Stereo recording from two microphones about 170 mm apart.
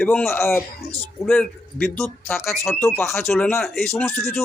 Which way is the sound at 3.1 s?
5° left (ahead or behind).